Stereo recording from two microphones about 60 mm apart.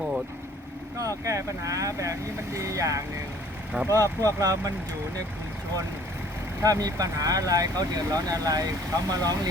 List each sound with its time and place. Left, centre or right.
0.9 s speech: right
6.6 s speech: right